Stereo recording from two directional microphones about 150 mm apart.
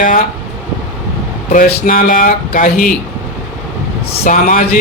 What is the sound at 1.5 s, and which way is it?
Speech, 65° left (ahead or behind).